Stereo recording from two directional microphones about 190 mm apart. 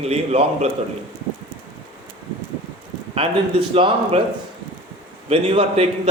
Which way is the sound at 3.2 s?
30° right (ahead or behind).